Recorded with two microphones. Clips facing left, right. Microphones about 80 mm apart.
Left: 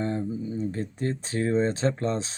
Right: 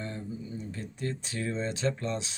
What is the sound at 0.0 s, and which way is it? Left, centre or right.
Speech, left.